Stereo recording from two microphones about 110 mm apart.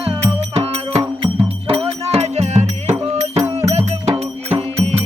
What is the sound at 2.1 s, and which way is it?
Music, 75° right (ahead or behind).